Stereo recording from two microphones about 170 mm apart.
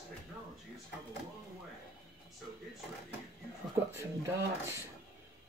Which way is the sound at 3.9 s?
15° right (ahead or behind).